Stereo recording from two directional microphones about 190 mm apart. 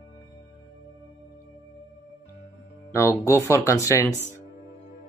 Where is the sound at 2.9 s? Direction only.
15° left (ahead or behind).